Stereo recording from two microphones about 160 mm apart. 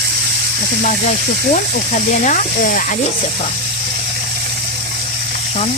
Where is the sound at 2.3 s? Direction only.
60° left (ahead or behind).